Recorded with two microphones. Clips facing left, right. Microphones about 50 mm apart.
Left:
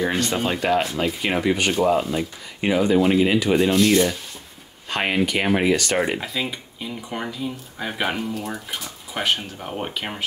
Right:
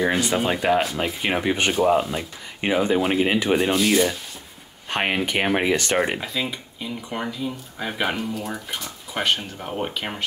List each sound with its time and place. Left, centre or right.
0.0 s speech: centre
1.4 s speech: right
2.0 s speech: centre
2.6 s speech: right
3.7 s speech: centre
4.8 s speech: centre
6.1 s speech: centre